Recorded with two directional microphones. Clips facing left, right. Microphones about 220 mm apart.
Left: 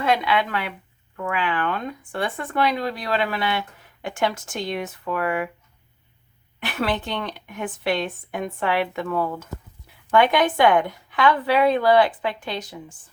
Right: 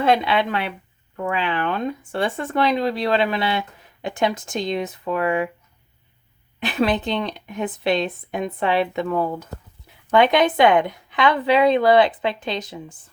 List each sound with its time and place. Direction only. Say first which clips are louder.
0.0 s speech: right 3 dB; 30° right (ahead or behind)
6.6 s speech: right 5 dB; 20° right (ahead or behind)